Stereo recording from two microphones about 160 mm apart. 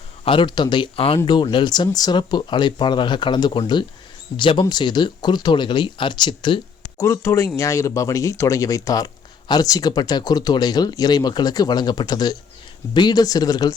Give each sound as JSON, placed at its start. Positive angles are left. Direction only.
{"t": 0.3, "sound": "speech", "side_deg": 30}
{"t": 6.9, "sound": "speech", "side_deg": 15}